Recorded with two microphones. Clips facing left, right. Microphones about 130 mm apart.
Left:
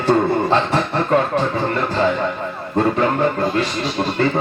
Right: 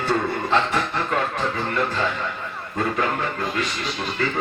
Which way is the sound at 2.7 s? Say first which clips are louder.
Left 7 dB; 30° left (ahead or behind).